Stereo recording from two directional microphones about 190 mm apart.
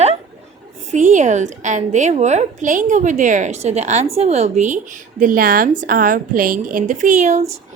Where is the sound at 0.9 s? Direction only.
40° right (ahead or behind).